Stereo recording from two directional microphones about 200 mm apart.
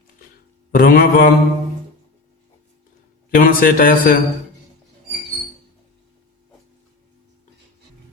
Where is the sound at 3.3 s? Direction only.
45° left (ahead or behind).